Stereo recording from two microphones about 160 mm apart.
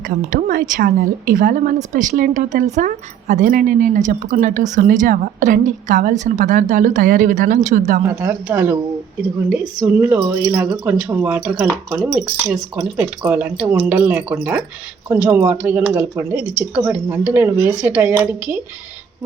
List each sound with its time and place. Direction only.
0.3 s a woman's voice: 60° right (ahead or behind)
8.0 s speech: 15° right (ahead or behind)